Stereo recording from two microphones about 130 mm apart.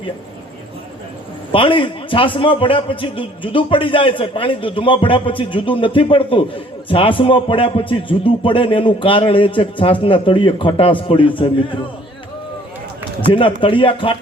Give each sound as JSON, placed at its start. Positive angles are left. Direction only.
{"t": 1.5, "sound": "a man's voice", "side_deg": 40}
{"t": 13.6, "sound": "a man's voice", "side_deg": 40}